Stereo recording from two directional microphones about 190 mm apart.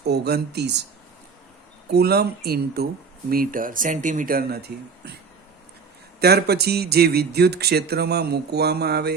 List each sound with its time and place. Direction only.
0.0 s speech: 60° right (ahead or behind)
1.9 s speech: 55° right (ahead or behind)
6.1 s speech: 55° right (ahead or behind)